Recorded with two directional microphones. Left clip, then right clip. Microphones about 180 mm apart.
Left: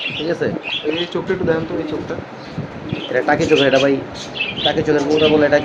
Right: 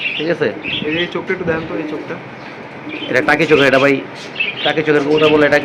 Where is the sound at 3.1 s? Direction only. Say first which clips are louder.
Right 3 dB; 20° right (ahead or behind).